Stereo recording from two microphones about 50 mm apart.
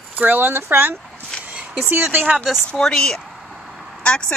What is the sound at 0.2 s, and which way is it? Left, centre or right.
Speech, right.